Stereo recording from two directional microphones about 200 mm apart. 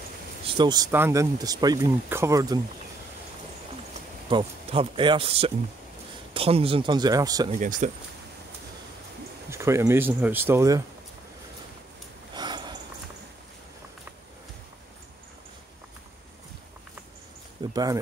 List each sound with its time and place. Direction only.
0.6 s speech: 20° right (ahead or behind)
4.3 s speech: 25° right (ahead or behind)
7.5 s speech: 40° right (ahead or behind)
9.5 s speech: 15° right (ahead or behind)
12.4 s sniff: 20° right (ahead or behind)
17.6 s a sound: 20° right (ahead or behind)